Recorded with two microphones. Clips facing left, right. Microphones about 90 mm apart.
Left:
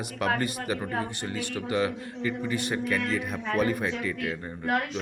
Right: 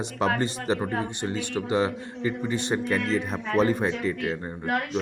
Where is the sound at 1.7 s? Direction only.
30° right (ahead or behind).